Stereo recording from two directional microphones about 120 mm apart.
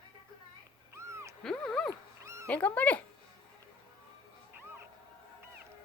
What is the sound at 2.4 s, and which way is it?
Speech, 10° left (ahead or behind).